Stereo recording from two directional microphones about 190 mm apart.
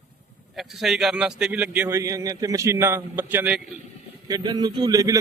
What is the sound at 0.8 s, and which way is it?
A man's voice, centre (ahead or behind).